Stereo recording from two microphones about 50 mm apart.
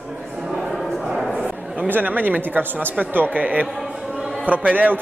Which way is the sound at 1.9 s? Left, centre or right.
Right.